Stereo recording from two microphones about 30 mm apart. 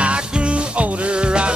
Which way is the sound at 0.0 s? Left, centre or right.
Right.